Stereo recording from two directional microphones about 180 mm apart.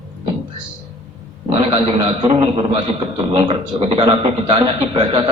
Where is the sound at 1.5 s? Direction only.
35° right (ahead or behind).